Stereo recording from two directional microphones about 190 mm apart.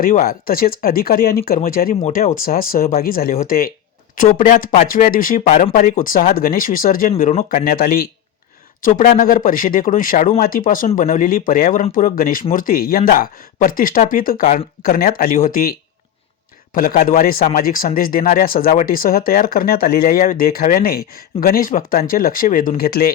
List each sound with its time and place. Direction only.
0.0 s speech: 50° left (ahead or behind)
2.4 s speech: 50° left (ahead or behind)
14.8 s speech: 50° left (ahead or behind)
16.7 s speech: 45° left (ahead or behind)